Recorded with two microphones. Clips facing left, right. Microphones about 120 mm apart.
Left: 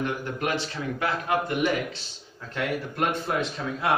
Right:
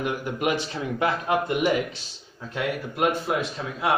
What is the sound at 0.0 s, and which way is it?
Speech, 15° right (ahead or behind).